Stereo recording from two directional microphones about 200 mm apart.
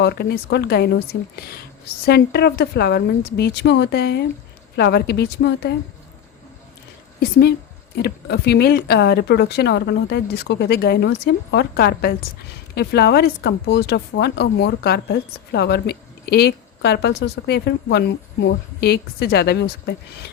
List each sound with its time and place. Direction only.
0.0 s speech: 55° left (ahead or behind)
7.2 s speech: 55° left (ahead or behind)